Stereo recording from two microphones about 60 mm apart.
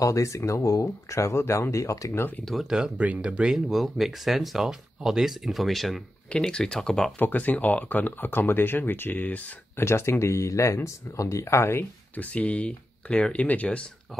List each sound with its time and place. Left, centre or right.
0.0 s speech: left
2.4 s speech: centre
3.2 s speech: centre
3.5 s speech: centre
6.3 s speech: centre
7.2 s speech: left
9.8 s speech: left
12.2 s speech: left